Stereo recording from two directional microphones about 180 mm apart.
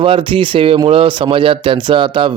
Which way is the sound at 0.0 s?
30° right (ahead or behind).